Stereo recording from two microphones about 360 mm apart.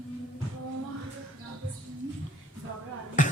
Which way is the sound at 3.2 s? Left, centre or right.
Left.